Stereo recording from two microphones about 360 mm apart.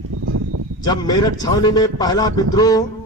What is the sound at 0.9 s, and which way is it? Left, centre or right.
Speech, centre.